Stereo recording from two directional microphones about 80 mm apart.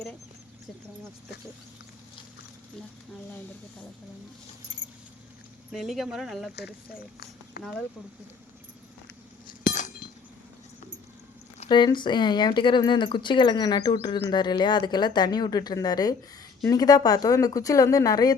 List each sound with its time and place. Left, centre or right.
5.7 s speech: centre
11.7 s speech: left